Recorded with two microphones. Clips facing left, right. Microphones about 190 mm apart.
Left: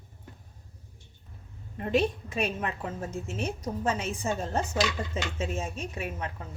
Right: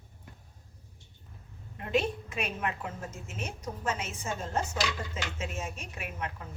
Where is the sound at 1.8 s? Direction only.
35° left (ahead or behind).